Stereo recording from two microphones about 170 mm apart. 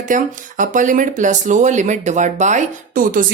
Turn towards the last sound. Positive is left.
turn(degrees=-50)  # may be behind; listen again after turning